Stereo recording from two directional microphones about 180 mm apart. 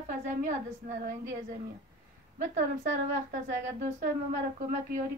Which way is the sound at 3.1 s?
45° right (ahead or behind).